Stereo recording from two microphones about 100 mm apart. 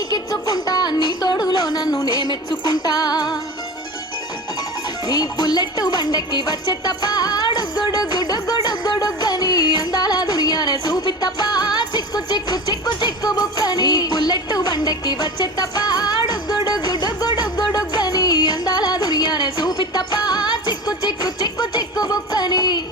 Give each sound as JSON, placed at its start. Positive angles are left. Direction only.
{"t": 0.1, "sound": "music", "side_deg": 40}
{"t": 5.0, "sound": "music", "side_deg": 45}
{"t": 22.0, "sound": "a sound", "side_deg": 40}